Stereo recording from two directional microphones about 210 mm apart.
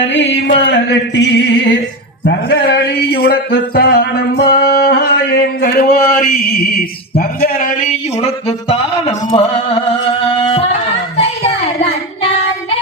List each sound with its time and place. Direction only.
0.0 s music: 60° left (ahead or behind)
2.2 s a sound: 50° left (ahead or behind)
8.2 s speech: 30° left (ahead or behind)
10.5 s music: 30° left (ahead or behind)
11.2 s child singing: 30° left (ahead or behind)